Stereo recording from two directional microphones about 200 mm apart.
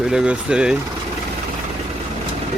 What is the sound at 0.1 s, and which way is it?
Speech, 5° right (ahead or behind).